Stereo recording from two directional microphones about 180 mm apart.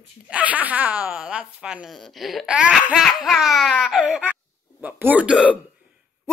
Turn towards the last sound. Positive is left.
turn(degrees=-5)  # may be behind; listen again after turning